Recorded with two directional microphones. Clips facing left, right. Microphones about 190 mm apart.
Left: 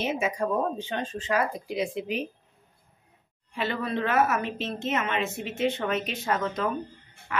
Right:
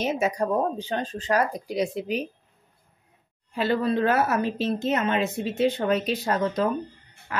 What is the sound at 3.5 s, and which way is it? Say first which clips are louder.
A woman's voice: right 6 dB; 35° right (ahead or behind).